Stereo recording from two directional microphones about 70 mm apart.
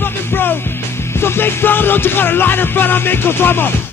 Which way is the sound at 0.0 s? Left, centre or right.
Left.